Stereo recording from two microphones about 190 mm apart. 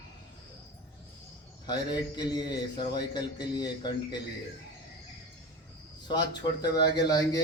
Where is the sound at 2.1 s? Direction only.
20° left (ahead or behind).